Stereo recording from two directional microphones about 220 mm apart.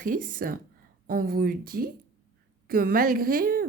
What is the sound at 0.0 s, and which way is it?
Speech, 40° right (ahead or behind).